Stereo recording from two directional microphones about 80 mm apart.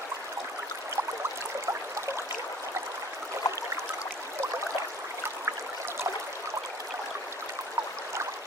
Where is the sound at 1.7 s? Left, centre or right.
Right.